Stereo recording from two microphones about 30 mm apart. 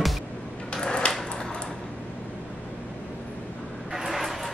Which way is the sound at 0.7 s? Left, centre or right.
Centre.